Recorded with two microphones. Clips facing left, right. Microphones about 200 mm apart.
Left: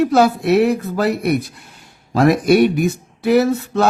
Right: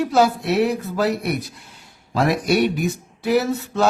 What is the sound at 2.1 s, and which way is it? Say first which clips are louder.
Speech: left 6 dB; 50° left (ahead or behind).